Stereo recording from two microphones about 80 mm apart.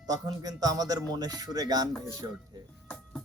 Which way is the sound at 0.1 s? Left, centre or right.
Right.